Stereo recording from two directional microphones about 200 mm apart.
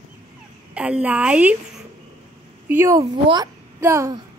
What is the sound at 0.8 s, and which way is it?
Speech, 5° right (ahead or behind).